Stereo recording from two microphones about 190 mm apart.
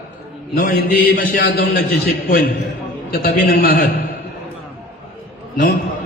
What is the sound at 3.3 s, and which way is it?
Speech, 50° left (ahead or behind).